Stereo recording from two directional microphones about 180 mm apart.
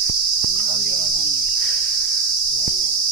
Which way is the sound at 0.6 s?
35° right (ahead or behind).